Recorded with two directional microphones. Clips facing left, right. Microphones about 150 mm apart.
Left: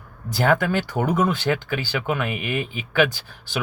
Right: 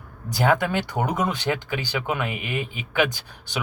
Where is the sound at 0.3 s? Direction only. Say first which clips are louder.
Left 1 dB; 15° right (ahead or behind).